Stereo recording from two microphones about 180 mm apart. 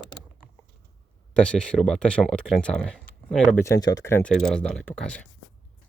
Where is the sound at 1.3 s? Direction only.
5° left (ahead or behind).